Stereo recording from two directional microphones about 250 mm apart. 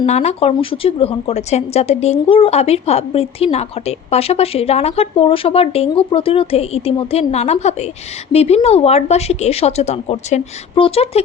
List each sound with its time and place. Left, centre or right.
0.0 s speech: left